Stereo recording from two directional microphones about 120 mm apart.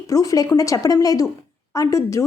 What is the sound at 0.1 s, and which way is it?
Speech, 30° left (ahead or behind).